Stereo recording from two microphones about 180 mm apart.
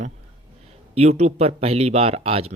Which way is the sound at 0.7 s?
35° right (ahead or behind).